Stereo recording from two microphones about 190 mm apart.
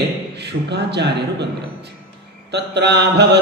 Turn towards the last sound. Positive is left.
turn(degrees=-60)  # may be behind; listen again after turning